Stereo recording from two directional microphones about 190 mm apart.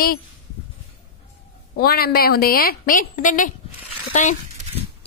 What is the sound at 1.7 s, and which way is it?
A woman's voice, 55° left (ahead or behind).